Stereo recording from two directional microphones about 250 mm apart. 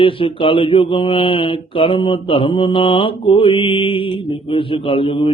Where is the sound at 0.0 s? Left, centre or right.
Left.